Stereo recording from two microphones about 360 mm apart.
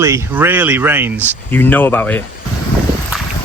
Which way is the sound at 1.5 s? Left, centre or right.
Centre.